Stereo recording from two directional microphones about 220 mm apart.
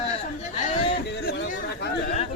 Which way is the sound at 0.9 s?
50° left (ahead or behind).